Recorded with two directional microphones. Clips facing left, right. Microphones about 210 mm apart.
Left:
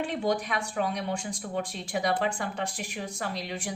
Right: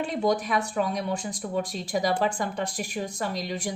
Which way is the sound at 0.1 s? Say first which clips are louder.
Right 4 dB; 40° right (ahead or behind).